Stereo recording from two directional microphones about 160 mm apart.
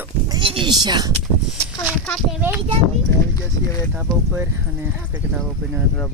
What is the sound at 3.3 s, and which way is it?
Speech, 20° left (ahead or behind).